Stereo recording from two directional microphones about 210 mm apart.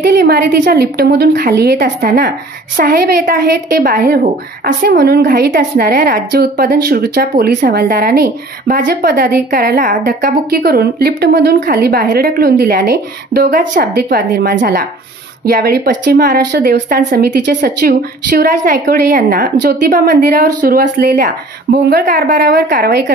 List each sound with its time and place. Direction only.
0.0 s speech: 50° right (ahead or behind)